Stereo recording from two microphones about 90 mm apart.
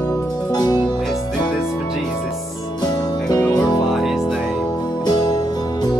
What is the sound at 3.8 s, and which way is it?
Music, centre (ahead or behind).